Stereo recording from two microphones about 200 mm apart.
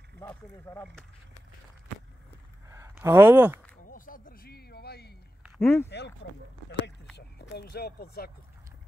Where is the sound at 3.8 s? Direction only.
45° left (ahead or behind).